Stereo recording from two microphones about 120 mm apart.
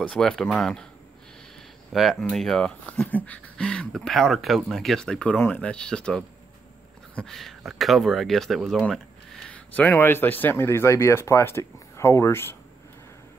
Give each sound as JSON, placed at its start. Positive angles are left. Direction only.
{"t": 0.0, "sound": "speech", "side_deg": 5}
{"t": 1.9, "sound": "speech", "side_deg": 0}
{"t": 9.5, "sound": "speech", "side_deg": 15}